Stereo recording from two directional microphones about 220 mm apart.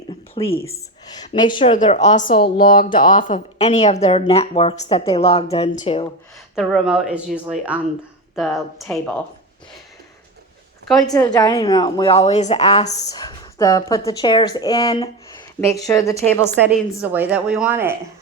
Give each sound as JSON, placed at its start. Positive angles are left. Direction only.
{"t": 0.4, "sound": "speech", "side_deg": 20}
{"t": 1.7, "sound": "a woman's voice", "side_deg": 35}
{"t": 6.6, "sound": "speech", "side_deg": 0}
{"t": 11.0, "sound": "speech", "side_deg": 15}
{"t": 17.0, "sound": "speech", "side_deg": -5}